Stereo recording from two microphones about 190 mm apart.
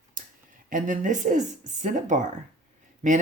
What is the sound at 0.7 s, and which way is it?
Speech, 40° right (ahead or behind).